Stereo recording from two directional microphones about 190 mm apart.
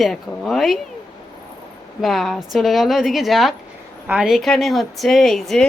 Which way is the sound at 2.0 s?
Centre (ahead or behind).